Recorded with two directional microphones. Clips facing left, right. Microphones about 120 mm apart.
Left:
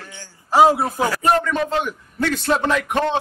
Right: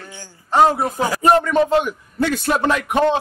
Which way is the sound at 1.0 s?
15° right (ahead or behind).